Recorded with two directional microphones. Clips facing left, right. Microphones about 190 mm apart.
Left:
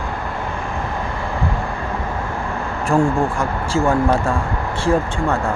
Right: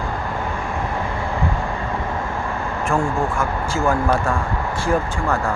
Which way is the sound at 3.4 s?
30° left (ahead or behind).